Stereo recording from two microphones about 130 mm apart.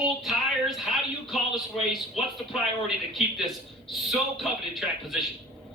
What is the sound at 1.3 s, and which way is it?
Speech, centre (ahead or behind).